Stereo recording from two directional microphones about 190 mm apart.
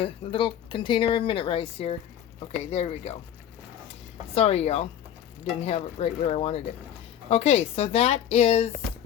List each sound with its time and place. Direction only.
0.0 s speech: 25° left (ahead or behind)
4.4 s speech: 35° left (ahead or behind)